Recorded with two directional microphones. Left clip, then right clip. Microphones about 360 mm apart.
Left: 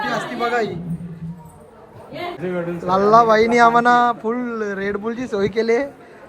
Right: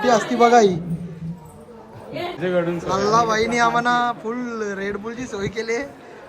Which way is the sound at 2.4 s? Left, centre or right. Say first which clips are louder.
Right 5 dB; right.